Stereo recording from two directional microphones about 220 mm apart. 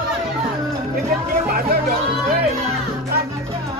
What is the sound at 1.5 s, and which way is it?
Chatter, 45° right (ahead or behind).